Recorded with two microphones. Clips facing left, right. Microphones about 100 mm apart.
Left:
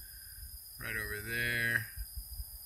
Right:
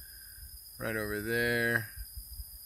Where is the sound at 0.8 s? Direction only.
20° right (ahead or behind).